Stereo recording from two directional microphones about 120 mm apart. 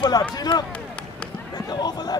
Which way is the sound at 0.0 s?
35° left (ahead or behind).